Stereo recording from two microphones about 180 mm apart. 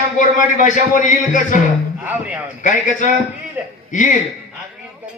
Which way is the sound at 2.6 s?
45° left (ahead or behind).